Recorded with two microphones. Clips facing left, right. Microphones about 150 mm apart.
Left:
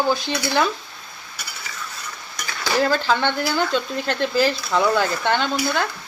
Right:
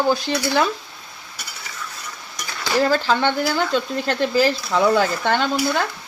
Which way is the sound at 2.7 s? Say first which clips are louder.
Right 1 dB; 5° right (ahead or behind).